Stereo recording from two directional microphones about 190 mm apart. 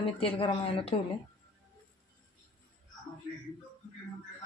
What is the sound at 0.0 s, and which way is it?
Speech, 30° left (ahead or behind).